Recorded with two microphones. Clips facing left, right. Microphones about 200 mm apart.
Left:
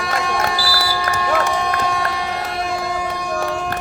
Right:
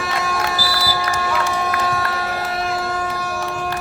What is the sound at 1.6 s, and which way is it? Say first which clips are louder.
Run: left 1 dB; 5° right (ahead or behind).